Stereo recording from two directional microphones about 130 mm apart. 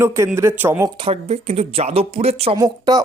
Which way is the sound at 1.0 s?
50° right (ahead or behind).